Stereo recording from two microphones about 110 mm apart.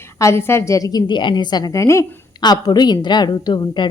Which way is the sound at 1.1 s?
45° left (ahead or behind).